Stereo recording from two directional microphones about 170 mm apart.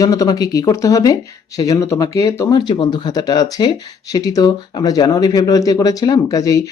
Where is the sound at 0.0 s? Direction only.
20° left (ahead or behind).